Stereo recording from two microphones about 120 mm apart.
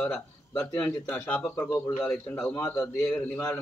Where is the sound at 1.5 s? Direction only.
25° left (ahead or behind).